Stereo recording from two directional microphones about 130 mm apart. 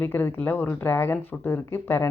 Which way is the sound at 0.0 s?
15° left (ahead or behind).